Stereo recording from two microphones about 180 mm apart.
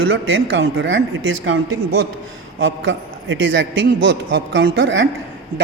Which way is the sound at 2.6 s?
90° right.